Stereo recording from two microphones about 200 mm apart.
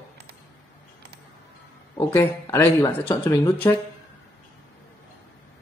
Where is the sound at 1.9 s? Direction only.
15° left (ahead or behind).